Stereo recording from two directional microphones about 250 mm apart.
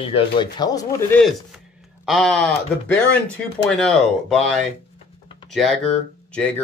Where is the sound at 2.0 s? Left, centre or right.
Centre.